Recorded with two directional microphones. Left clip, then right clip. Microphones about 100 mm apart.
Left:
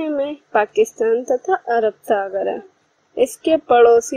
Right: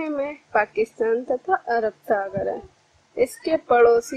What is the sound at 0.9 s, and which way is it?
A woman's voice, 20° left (ahead or behind).